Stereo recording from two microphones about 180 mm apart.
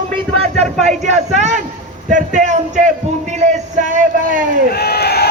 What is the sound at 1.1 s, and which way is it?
Speech, 40° right (ahead or behind).